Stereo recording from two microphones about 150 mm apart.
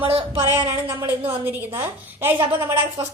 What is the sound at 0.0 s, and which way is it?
Speech, 35° right (ahead or behind).